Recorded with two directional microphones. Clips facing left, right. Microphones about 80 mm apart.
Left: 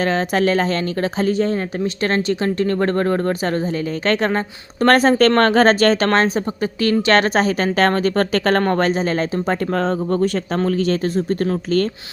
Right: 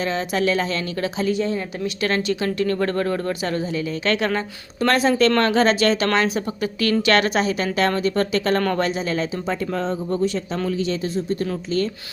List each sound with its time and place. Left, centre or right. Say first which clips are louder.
0.0 s speech: left 4 dB; left
8.6 s speech: left 4 dB; left